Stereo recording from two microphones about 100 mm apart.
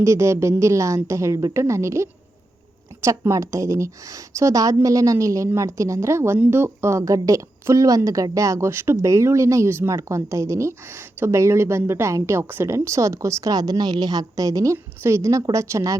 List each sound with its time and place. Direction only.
0.0 s a woman's voice: 30° right (ahead or behind)